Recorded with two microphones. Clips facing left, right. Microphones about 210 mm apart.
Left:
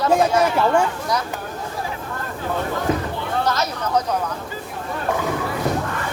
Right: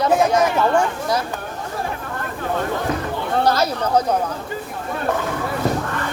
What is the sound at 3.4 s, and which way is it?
Speech, 30° right (ahead or behind).